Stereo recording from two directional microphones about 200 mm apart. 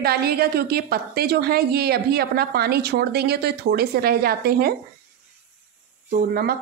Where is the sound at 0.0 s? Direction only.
50° right (ahead or behind).